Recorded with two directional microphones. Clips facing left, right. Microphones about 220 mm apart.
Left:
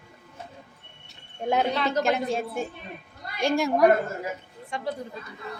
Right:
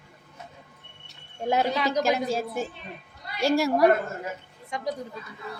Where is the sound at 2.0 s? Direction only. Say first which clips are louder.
Even; centre (ahead or behind).